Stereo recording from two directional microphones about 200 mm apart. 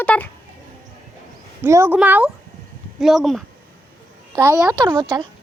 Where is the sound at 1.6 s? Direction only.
15° right (ahead or behind).